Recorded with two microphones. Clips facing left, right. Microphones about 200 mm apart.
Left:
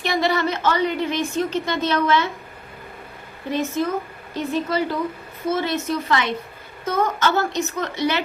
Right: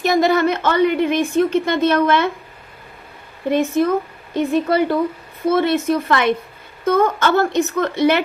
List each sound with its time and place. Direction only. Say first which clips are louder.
0.0 s a woman's voice: right 6 dB; 45° right (ahead or behind)
3.5 s a woman's voice: right 6 dB; 55° right (ahead or behind)